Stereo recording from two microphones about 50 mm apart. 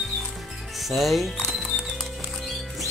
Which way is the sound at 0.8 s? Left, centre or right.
Centre.